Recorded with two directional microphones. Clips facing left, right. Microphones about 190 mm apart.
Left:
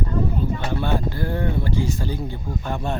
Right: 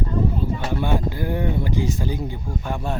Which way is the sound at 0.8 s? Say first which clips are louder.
Right 1 dB; 15° right (ahead or behind).